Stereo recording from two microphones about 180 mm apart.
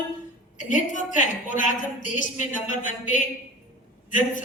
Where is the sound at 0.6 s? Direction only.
45° left (ahead or behind).